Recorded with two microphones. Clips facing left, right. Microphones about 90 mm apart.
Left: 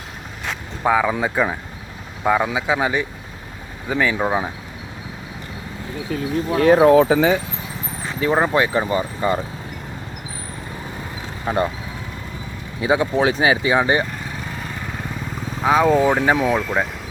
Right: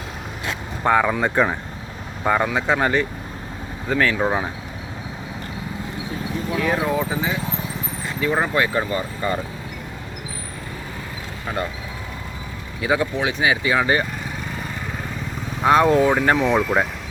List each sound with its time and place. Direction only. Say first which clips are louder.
0.9 s speech: even; centre (ahead or behind)
4.2 s speech: left 1 dB; centre (ahead or behind)
6.6 s speech: left 11 dB; 60° left (ahead or behind)
8.2 s speech: left 3 dB; 25° left (ahead or behind)
11.4 s speech: left 6 dB; 25° left (ahead or behind)
12.8 s speech: left 2 dB; 25° left (ahead or behind)
13.1 s speech: left 4 dB; 35° left (ahead or behind)
15.6 s speech: even; centre (ahead or behind)